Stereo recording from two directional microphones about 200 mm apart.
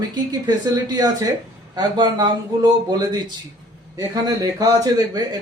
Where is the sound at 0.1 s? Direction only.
20° right (ahead or behind).